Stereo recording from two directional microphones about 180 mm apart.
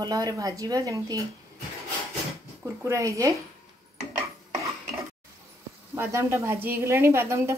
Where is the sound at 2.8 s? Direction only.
15° right (ahead or behind).